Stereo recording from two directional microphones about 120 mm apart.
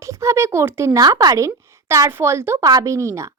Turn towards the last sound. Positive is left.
turn(degrees=-25)  # may be behind; listen again after turning